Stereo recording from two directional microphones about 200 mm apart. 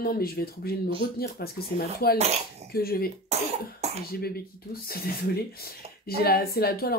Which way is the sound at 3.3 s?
35° right (ahead or behind).